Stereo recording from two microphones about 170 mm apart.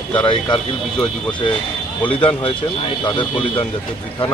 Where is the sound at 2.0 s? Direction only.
30° left (ahead or behind).